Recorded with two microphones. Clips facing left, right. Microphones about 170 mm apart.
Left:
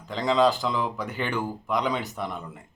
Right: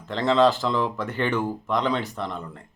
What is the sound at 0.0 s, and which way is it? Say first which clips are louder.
Speech: right 2 dB; centre (ahead or behind).